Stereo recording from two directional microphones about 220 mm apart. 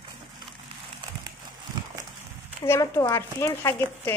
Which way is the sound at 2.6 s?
10° left (ahead or behind).